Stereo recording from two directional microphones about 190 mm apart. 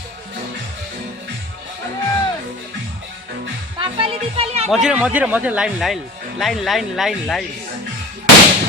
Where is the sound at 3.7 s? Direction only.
30° right (ahead or behind).